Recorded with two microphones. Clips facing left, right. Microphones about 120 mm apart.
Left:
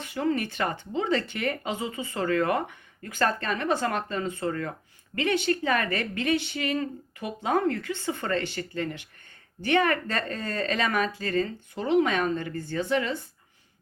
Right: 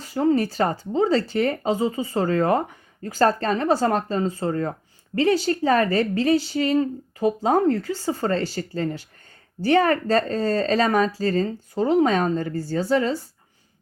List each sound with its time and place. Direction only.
0.0 s speech: 35° right (ahead or behind)